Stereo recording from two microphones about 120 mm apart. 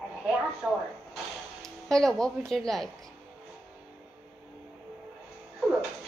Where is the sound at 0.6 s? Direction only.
5° right (ahead or behind).